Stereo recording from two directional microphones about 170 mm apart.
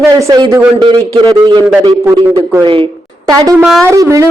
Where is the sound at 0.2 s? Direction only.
20° right (ahead or behind).